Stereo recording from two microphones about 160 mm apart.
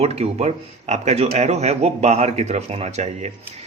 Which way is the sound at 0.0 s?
40° right (ahead or behind).